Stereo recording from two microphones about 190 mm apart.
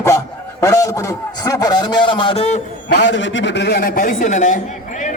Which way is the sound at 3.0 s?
75° left (ahead or behind).